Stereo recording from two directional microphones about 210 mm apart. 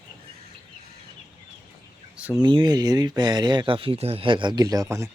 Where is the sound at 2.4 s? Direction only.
20° right (ahead or behind).